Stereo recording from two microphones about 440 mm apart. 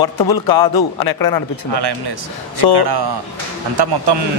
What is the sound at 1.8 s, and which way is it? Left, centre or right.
A man's voice, right.